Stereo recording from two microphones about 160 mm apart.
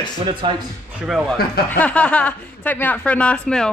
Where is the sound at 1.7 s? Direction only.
10° left (ahead or behind).